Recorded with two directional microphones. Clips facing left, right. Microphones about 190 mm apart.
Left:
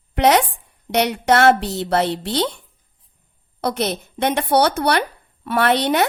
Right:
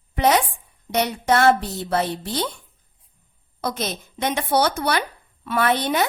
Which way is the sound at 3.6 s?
65° left (ahead or behind).